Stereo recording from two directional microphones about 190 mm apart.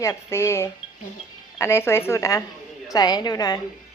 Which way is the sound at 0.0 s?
15° left (ahead or behind).